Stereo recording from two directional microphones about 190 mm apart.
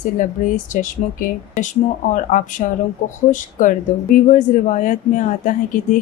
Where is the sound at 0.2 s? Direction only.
40° left (ahead or behind).